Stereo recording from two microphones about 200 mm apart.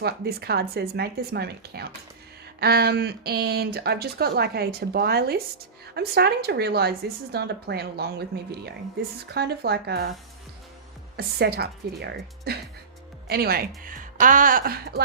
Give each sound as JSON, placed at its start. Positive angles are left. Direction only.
{"t": 0.0, "sound": "speech", "side_deg": -50}
{"t": 9.3, "sound": "speech", "side_deg": -55}
{"t": 11.2, "sound": "speech", "side_deg": -55}